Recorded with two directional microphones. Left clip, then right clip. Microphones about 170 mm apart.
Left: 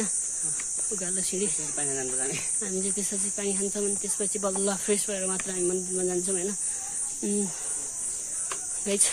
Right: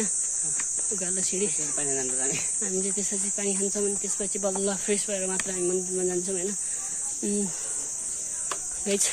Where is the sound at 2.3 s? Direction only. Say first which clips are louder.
Right 2 dB; centre (ahead or behind).